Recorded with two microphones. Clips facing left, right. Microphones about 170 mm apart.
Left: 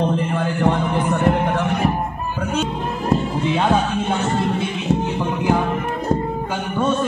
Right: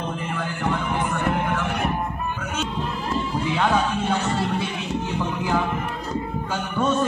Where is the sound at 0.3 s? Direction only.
40° left (ahead or behind).